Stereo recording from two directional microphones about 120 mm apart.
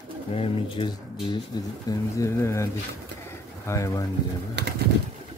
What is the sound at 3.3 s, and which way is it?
Pigeon, 25° left (ahead or behind).